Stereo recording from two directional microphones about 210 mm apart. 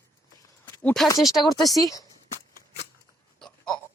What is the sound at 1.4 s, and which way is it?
Speech, 15° left (ahead or behind).